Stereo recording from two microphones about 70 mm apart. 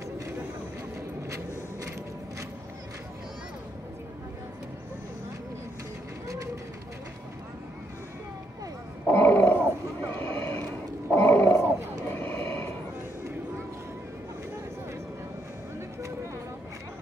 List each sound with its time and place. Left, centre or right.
6.2 s vehicle: right
9.0 s grunt: left
10.1 s a sound: left
12.1 s vehicle: left